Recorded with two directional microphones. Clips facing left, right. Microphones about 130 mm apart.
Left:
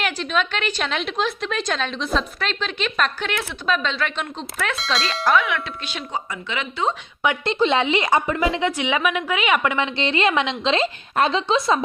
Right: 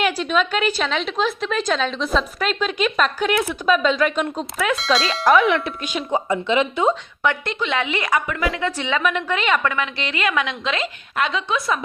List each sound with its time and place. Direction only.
0.0 s a woman's voice: 5° right (ahead or behind)
4.5 s a woman's voice: centre (ahead or behind)
5.4 s speech: 25° right (ahead or behind)
7.2 s a woman's voice: 15° left (ahead or behind)
7.6 s a woman's voice: 30° left (ahead or behind)
8.7 s a woman's voice: 15° left (ahead or behind)
9.6 s a woman's voice: 25° left (ahead or behind)